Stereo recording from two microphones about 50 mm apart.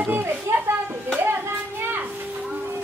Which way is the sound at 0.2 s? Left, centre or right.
Right.